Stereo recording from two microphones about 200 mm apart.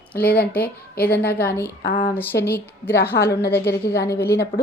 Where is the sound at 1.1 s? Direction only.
50° left (ahead or behind).